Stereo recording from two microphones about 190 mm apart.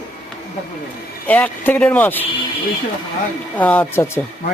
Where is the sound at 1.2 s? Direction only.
10° left (ahead or behind).